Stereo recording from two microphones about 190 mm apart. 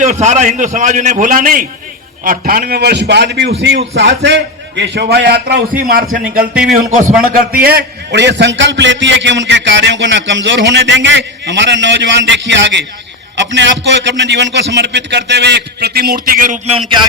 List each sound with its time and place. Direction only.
0.0 s a man's voice: 40° right (ahead or behind)